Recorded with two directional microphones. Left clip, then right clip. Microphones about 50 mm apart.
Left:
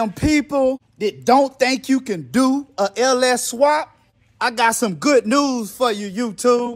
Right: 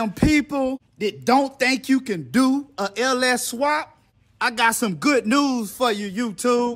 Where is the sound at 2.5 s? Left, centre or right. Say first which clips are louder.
Left 5 dB; right.